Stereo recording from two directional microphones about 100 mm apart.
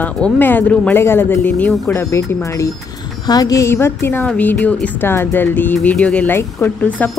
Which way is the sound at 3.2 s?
40° left (ahead or behind).